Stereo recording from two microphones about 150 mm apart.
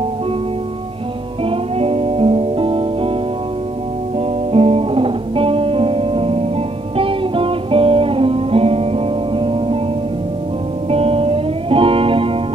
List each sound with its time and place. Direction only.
1.4 s music: 40° right (ahead or behind)
4.5 s music: 40° right (ahead or behind)
10.9 s music: 40° right (ahead or behind)